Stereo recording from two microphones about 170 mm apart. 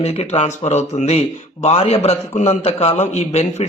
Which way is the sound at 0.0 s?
40° left (ahead or behind).